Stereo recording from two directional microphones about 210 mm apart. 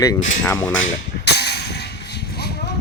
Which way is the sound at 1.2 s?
50° left (ahead or behind).